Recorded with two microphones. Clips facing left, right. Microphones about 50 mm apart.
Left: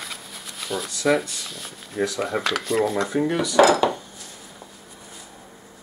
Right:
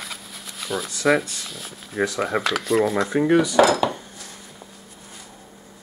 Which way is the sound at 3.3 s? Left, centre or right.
Centre.